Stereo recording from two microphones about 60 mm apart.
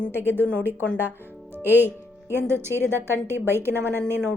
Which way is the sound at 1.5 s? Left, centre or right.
Right.